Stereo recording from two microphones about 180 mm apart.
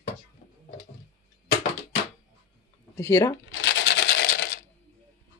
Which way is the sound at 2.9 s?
15° left (ahead or behind).